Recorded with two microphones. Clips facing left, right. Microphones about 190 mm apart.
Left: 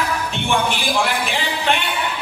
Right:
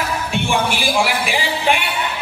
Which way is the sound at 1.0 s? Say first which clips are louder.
Right 2 dB; 5° right (ahead or behind).